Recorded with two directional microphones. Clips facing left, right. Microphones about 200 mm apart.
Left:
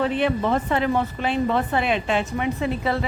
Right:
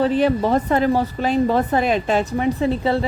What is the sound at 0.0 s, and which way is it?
A woman's voice, 35° right (ahead or behind).